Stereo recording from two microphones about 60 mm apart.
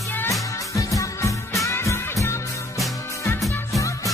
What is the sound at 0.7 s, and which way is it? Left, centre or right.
Music, left.